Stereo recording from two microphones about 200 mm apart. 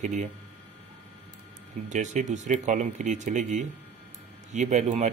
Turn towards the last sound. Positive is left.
turn(degrees=-35)  # may be behind; listen again after turning